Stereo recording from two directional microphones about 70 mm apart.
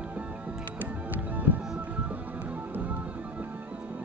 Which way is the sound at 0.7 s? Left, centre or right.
Right.